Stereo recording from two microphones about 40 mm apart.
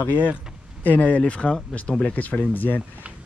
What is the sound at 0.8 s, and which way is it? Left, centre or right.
Speech, left.